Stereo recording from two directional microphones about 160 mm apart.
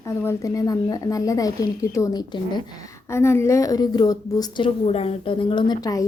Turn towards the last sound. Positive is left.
turn(degrees=25)  # may be behind; listen again after turning